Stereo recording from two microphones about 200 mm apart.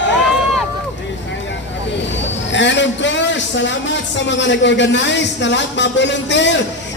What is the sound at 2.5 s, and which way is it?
A man's voice, 65° left (ahead or behind).